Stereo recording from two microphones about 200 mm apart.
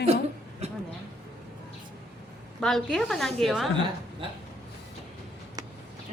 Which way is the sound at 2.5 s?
Centre (ahead or behind).